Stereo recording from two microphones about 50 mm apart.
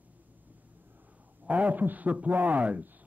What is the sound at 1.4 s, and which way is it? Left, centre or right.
A man's voice, right.